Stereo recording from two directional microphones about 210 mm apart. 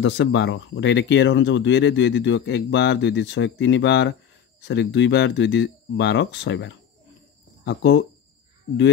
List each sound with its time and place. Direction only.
0.0 s speech: 60° left (ahead or behind)